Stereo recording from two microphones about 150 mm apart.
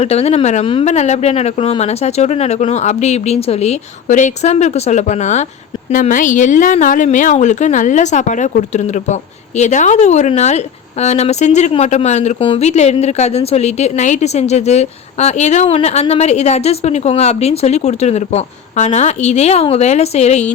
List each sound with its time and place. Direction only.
0.0 s a woman's voice: 45° left (ahead or behind)
0.6 s a woman's voice: 35° left (ahead or behind)
0.9 s a woman's voice: 50° left (ahead or behind)
5.9 s a woman's voice: 60° left (ahead or behind); by 20.5 s 45° left (ahead or behind)